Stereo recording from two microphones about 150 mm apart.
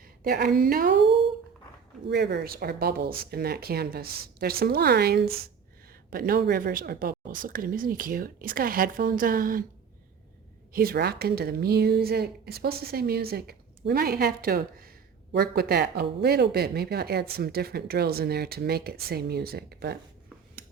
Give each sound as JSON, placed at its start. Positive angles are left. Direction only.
{"t": 0.2, "sound": "speech", "side_deg": -90}
{"t": 2.1, "sound": "speech", "side_deg": -90}
{"t": 6.1, "sound": "speech", "side_deg": -75}
{"t": 10.7, "sound": "speech", "side_deg": -80}
{"t": 15.4, "sound": "speech", "side_deg": -90}